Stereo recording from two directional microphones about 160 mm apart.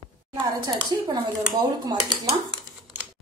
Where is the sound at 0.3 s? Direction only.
25° right (ahead or behind).